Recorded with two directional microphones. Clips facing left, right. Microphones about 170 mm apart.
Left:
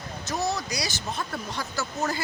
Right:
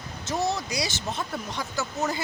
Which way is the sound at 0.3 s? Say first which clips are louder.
Right 1 dB; 25° right (ahead or behind).